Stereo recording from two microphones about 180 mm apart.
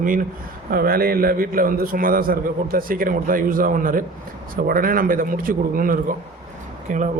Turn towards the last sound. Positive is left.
turn(degrees=-45)  # may be behind; listen again after turning